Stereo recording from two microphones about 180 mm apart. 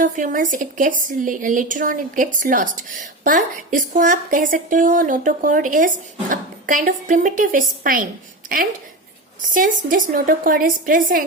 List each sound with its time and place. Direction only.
0.0 s speech: 50° right (ahead or behind)
9.5 s speech: 50° right (ahead or behind)